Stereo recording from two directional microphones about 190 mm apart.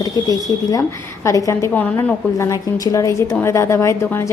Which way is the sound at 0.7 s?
15° left (ahead or behind).